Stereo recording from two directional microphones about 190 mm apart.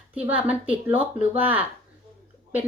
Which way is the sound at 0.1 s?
10° right (ahead or behind).